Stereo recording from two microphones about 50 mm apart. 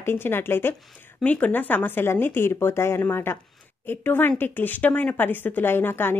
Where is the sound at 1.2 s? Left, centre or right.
Left.